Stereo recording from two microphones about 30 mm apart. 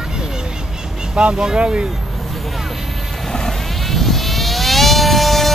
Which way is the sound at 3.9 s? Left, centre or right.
Centre.